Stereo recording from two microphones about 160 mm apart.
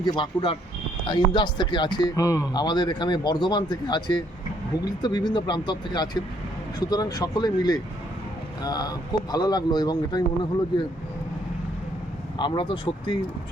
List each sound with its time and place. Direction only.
0.0 s speech: 30° left (ahead or behind)
12.4 s speech: 30° left (ahead or behind)